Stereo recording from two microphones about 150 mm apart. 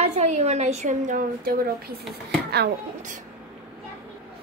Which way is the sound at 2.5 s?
90° right.